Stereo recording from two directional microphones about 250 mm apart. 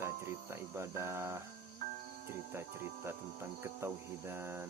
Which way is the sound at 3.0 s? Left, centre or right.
Centre.